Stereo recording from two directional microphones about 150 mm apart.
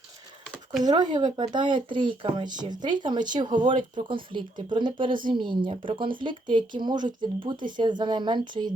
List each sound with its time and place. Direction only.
0.8 s a woman's voice: 30° right (ahead or behind)